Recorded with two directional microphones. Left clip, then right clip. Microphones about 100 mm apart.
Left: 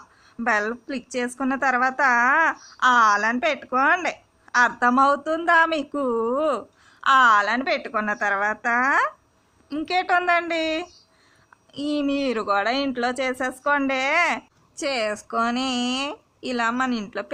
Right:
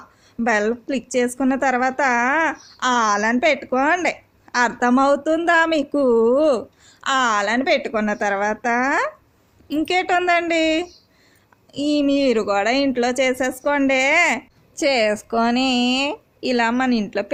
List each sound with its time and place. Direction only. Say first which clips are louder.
0.4 s a woman's voice: right 3 dB; 45° right (ahead or behind)
7.0 s a woman's voice: left 3 dB; 35° right (ahead or behind)